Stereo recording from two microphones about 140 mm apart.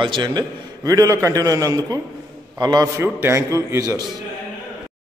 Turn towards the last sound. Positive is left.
turn(degrees=-20)  # may be behind; listen again after turning